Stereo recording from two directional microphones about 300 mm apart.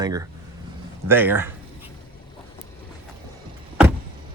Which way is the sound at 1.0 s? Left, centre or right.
Centre.